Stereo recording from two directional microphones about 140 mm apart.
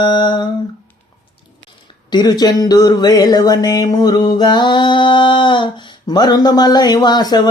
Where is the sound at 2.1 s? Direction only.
30° left (ahead or behind).